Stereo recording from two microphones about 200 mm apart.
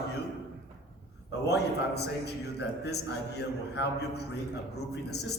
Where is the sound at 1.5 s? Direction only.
55° left (ahead or behind).